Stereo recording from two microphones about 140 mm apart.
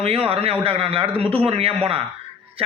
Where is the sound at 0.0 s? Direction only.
45° right (ahead or behind).